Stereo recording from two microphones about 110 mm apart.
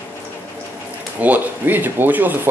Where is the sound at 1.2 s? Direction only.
15° right (ahead or behind).